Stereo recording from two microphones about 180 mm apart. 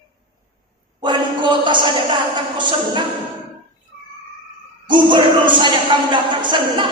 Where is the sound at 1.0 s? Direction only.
25° right (ahead or behind).